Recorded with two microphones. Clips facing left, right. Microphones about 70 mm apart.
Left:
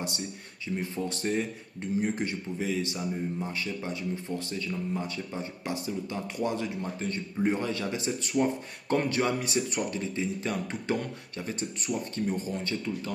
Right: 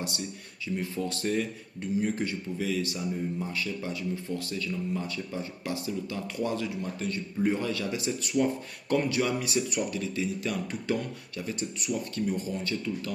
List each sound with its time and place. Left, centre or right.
0.1 s a man's voice: left